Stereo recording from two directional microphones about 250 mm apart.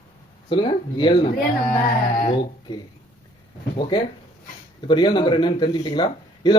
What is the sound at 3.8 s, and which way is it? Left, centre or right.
A man's voice, centre.